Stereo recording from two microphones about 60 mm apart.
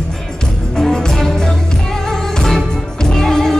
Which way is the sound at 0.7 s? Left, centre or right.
Centre.